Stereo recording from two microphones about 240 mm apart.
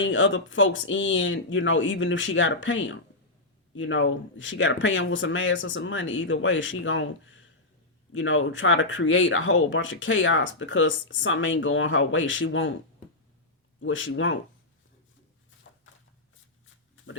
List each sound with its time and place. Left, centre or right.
0.0 s speech: left
13.7 s speech: left